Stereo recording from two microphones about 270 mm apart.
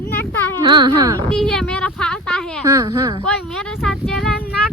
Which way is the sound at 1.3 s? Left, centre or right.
Centre.